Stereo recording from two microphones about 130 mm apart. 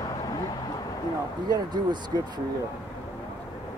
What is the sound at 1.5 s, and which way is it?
Speech, 35° right (ahead or behind).